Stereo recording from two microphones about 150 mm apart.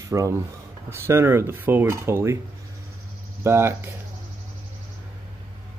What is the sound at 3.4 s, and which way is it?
Speech, 15° right (ahead or behind).